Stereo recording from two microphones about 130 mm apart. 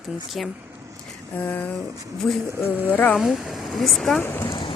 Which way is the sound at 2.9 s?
15° left (ahead or behind).